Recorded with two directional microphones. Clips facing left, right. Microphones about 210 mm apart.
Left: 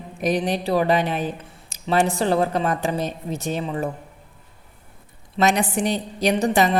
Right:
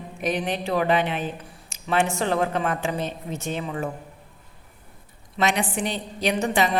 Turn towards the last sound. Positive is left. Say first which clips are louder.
# left 4 dB
turn(degrees=40)  # may be behind; listen again after turning